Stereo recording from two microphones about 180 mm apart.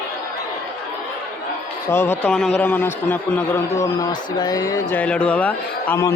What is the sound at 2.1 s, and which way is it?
A man's voice, 5° left (ahead or behind).